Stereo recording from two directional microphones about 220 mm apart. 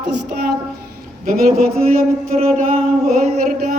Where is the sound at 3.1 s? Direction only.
35° right (ahead or behind).